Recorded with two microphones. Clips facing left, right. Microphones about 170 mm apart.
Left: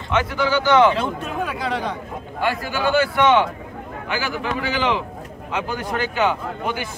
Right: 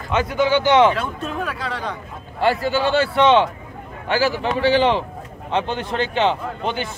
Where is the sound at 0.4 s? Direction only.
20° right (ahead or behind).